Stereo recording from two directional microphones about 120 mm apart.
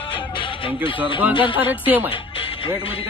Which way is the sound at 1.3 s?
45° left (ahead or behind).